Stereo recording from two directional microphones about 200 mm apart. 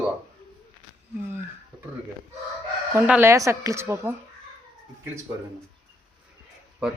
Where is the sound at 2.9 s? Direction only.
10° right (ahead or behind).